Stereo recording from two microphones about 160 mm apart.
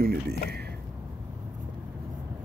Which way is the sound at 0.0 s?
70° right (ahead or behind).